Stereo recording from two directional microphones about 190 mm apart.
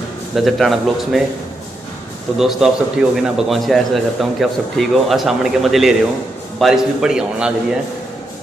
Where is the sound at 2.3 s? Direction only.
Centre (ahead or behind).